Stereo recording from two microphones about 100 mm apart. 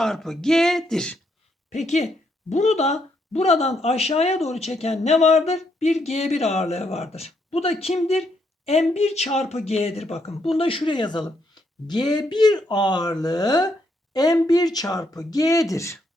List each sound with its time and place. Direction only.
0.0 s speech: 5° left (ahead or behind)
2.7 s speech: 90° left
10.6 s a woman's voice: 65° left (ahead or behind); by 16.0 s 30° left (ahead or behind)